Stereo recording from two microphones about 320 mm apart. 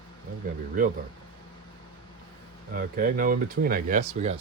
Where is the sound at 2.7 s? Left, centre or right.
Right.